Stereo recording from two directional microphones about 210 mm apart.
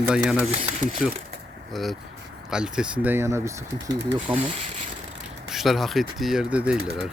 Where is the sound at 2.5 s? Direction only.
5° right (ahead or behind); by 4.4 s 20° right (ahead or behind).